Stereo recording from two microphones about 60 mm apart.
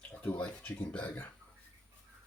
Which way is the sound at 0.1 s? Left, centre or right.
Left.